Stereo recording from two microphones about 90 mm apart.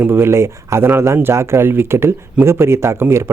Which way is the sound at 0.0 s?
25° right (ahead or behind).